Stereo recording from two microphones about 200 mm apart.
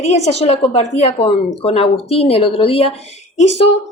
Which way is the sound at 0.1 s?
30° left (ahead or behind).